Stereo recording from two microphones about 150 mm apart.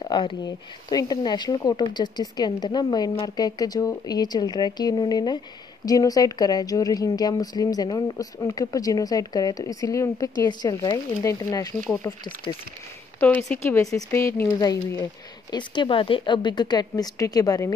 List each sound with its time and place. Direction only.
0.0 s a sound: 35° left (ahead or behind)
0.8 s speech: 25° left (ahead or behind)
13.9 s speech: 20° left (ahead or behind)